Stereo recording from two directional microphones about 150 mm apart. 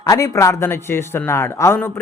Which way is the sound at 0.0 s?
20° left (ahead or behind).